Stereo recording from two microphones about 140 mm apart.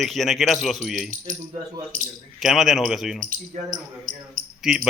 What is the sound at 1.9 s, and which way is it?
Speech, 70° right (ahead or behind).